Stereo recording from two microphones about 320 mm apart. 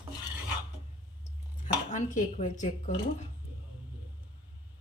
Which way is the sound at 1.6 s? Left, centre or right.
Left.